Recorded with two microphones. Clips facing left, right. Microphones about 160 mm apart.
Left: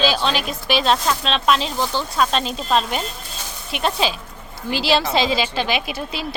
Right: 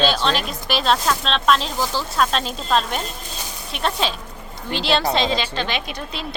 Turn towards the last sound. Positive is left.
turn(degrees=5)  # may be behind; listen again after turning